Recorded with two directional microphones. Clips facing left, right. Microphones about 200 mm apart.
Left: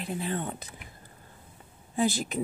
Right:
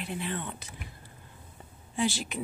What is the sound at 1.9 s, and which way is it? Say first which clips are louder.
Speech: left 3 dB; 40° left (ahead or behind).